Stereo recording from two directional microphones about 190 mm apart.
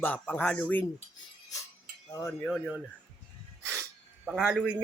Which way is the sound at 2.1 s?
15° left (ahead or behind).